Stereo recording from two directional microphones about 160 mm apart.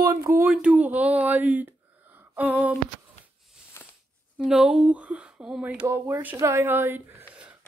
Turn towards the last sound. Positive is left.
turn(degrees=-10)  # may be behind; listen again after turning